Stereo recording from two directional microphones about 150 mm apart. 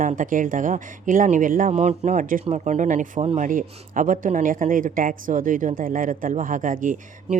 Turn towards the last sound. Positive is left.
turn(degrees=-60)  # may be behind; listen again after turning